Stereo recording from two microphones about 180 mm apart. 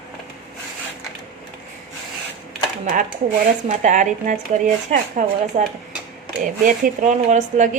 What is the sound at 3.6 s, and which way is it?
Speech, 45° right (ahead or behind).